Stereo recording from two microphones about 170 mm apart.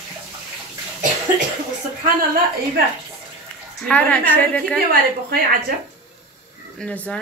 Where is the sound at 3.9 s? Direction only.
10° left (ahead or behind).